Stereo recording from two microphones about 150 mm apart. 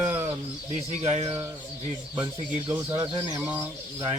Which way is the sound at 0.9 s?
50° right (ahead or behind).